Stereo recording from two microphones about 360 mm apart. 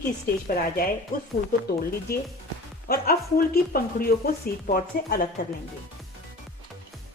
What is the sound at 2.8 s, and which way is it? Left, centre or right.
Speech, left.